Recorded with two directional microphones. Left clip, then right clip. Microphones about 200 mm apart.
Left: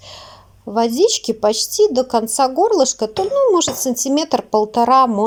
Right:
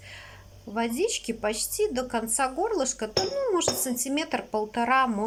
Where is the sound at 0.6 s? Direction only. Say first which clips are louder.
Left 13 dB; 25° left (ahead or behind).